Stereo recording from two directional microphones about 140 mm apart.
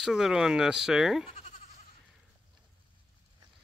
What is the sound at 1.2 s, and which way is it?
Goat, 50° left (ahead or behind).